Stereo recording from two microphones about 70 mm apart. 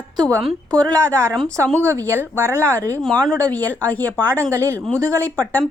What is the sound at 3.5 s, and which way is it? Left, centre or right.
Speech, left.